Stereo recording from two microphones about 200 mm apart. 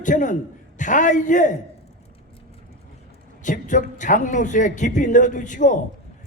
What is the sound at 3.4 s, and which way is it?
A man's voice, 40° left (ahead or behind).